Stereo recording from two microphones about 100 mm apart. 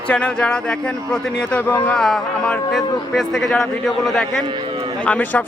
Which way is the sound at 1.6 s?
20° left (ahead or behind).